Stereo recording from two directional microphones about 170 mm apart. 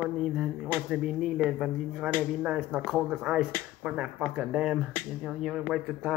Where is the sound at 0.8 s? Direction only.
5° right (ahead or behind).